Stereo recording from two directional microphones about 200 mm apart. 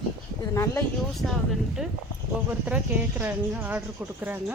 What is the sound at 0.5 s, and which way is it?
Speech, 15° left (ahead or behind).